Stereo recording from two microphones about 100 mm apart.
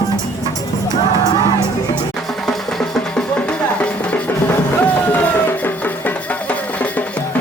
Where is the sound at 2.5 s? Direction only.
5° left (ahead or behind).